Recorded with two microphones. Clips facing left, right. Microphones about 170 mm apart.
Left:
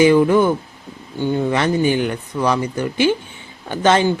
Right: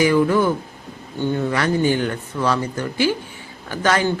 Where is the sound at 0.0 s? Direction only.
20° left (ahead or behind).